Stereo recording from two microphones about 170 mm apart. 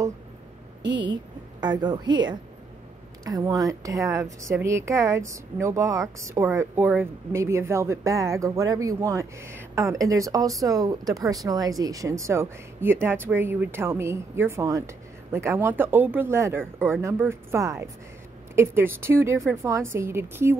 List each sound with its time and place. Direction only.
1.6 s a woman's voice: 25° right (ahead or behind)